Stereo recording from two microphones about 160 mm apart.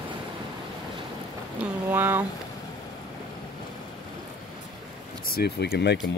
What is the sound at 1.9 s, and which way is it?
Speech, 15° right (ahead or behind).